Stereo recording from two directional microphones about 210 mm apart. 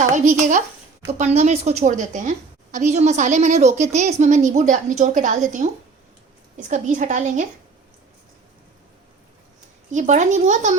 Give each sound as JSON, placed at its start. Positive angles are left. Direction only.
{"t": 0.1, "sound": "a woman's voice", "side_deg": -35}
{"t": 9.9, "sound": "a woman's voice", "side_deg": -35}